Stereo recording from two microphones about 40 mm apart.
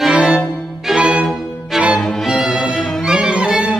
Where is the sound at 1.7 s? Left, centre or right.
Centre.